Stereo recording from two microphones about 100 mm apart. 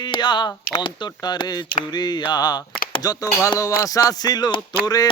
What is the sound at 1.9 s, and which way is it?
Speech, 45° left (ahead or behind).